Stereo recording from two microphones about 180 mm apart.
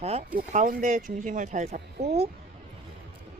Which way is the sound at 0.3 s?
50° right (ahead or behind).